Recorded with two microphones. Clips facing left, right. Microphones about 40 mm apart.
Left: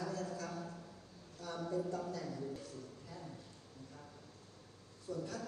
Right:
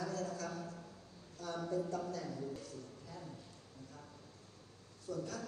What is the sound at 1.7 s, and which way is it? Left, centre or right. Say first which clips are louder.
A man's voice: even; left.